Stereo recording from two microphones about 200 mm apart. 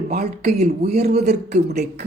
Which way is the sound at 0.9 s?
35° right (ahead or behind).